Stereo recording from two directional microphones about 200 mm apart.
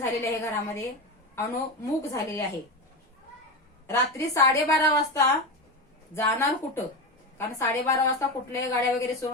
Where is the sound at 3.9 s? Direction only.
15° left (ahead or behind).